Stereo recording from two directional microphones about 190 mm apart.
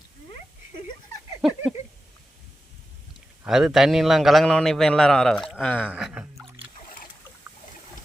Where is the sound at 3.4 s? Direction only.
Centre (ahead or behind).